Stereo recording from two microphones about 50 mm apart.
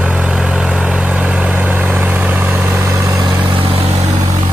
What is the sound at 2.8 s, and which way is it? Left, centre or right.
Vehicle, right.